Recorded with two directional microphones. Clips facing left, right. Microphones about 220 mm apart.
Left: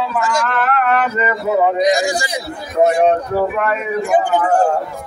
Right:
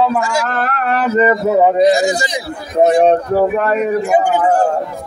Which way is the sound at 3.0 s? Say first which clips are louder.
Right 3 dB; 35° right (ahead or behind).